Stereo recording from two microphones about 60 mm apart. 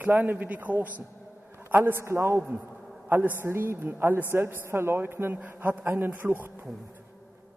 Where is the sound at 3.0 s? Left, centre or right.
Right.